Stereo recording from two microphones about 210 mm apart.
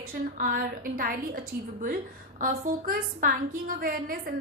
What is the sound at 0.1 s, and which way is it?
A woman's voice, 40° right (ahead or behind).